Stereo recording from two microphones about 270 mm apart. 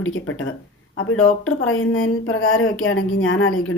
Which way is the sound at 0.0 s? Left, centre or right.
Left.